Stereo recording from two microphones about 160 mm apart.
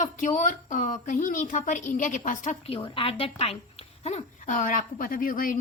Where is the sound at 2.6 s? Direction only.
35° left (ahead or behind).